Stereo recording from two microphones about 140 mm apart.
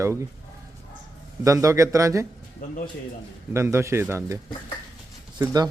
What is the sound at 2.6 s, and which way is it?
Speech, 75° left (ahead or behind).